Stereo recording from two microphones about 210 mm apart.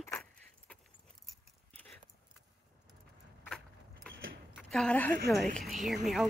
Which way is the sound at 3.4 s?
Centre (ahead or behind).